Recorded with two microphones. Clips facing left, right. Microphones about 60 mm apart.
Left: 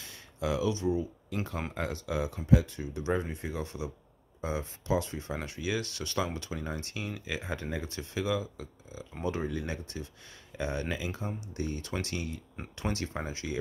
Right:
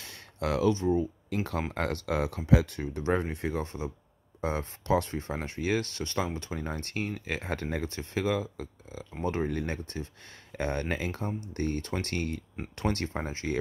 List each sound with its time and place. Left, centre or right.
0.0 s a sound: right
0.7 s speech: right
1.7 s speech: right
2.8 s speech: right
3.6 s speech: right
4.4 s speech: right
13.1 s speech: right